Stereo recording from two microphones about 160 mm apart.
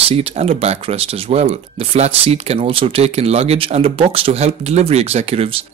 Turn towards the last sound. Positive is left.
turn(degrees=-35)  # may be behind; listen again after turning